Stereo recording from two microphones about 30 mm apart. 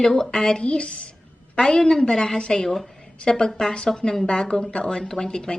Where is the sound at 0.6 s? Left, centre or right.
Left.